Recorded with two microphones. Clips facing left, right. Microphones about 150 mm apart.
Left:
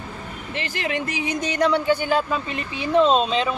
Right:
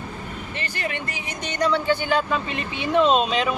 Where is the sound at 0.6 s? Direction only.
90° left.